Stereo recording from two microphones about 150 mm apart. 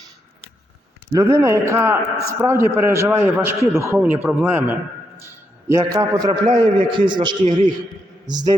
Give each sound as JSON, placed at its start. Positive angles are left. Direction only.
{"t": 1.1, "sound": "a man's voice", "side_deg": -20}
{"t": 5.2, "sound": "a sound", "side_deg": -15}
{"t": 5.8, "sound": "a man's voice", "side_deg": -25}